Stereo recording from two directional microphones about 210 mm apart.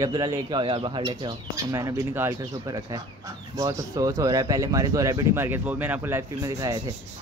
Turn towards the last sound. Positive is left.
turn(degrees=-15)  # may be behind; listen again after turning